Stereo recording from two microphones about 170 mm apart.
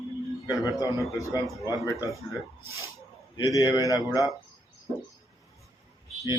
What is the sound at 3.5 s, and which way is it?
Speech, 20° left (ahead or behind).